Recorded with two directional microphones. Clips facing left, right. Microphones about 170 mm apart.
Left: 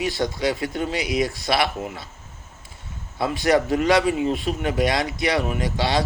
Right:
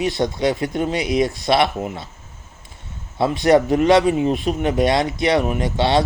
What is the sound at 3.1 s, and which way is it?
Speech, 20° right (ahead or behind).